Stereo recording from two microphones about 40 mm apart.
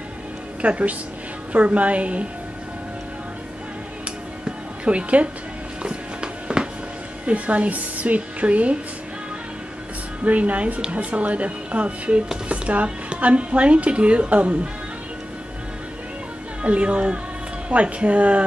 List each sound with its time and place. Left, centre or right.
0.6 s speech: right
4.5 s music: right
7.2 s speech: right
10.2 s speech: right
16.6 s speech: right